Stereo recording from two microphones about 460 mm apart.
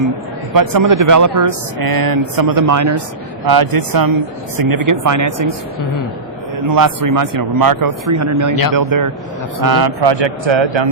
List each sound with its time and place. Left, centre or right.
0.5 s speech: right
3.4 s speech: right
6.7 s a man's voice: right